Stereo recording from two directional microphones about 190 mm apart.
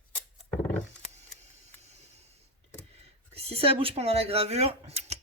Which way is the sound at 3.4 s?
30° right (ahead or behind).